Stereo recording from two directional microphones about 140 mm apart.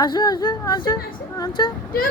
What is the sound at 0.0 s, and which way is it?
Speech, 30° left (ahead or behind).